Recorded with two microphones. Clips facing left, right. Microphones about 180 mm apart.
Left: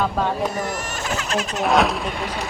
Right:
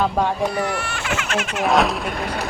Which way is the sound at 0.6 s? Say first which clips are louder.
Right 2 dB; 40° left (ahead or behind).